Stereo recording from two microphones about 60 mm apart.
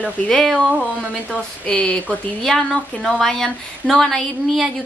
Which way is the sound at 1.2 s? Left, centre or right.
Centre.